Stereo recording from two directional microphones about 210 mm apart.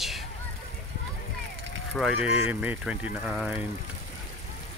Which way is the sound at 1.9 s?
Centre (ahead or behind).